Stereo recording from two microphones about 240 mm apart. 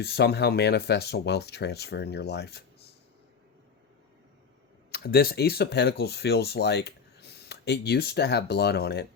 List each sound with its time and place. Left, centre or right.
0.0 s speech: left
4.9 s speech: left